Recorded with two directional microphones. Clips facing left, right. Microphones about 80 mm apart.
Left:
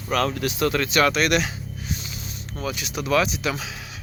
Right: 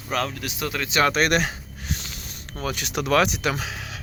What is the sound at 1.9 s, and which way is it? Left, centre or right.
Music, right.